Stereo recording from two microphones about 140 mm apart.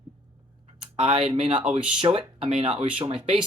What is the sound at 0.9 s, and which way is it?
Speech, 45° right (ahead or behind).